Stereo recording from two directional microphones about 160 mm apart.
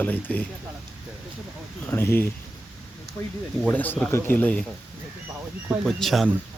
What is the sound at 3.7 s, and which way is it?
Speech, 10° left (ahead or behind).